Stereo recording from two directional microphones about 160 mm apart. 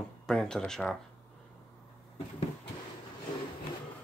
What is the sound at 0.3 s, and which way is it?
Speech, 5° left (ahead or behind).